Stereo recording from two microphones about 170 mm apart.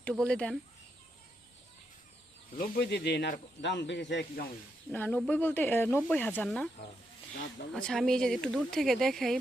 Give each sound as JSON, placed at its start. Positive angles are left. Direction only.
{"t": 0.0, "sound": "speech", "side_deg": 5}
{"t": 2.6, "sound": "speech", "side_deg": 70}
{"t": 4.9, "sound": "speech", "side_deg": 10}
{"t": 7.7, "sound": "speech", "side_deg": 5}